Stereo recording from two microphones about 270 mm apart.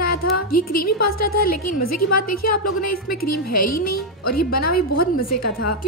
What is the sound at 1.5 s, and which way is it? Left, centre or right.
A woman's voice, left.